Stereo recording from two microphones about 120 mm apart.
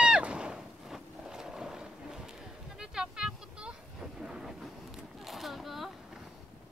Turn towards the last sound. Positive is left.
turn(degrees=0)  # may be behind; listen again after turning